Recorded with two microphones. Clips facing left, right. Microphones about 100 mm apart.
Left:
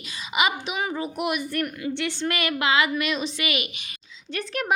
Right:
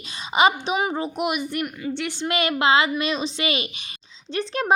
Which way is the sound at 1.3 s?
15° right (ahead or behind).